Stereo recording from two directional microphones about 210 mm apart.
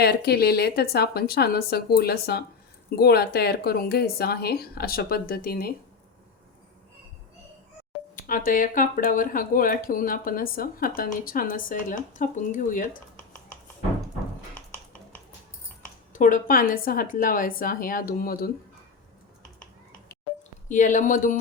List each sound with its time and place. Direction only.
0.0 s speech: 50° left (ahead or behind)
8.1 s speech: 40° left (ahead or behind)
16.1 s speech: 40° left (ahead or behind)
20.7 s speech: 35° left (ahead or behind)